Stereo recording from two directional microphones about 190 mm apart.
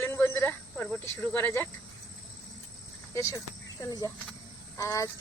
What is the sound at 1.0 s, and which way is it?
Speech, 15° left (ahead or behind).